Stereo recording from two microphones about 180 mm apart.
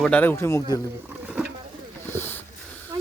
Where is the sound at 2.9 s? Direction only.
25° right (ahead or behind).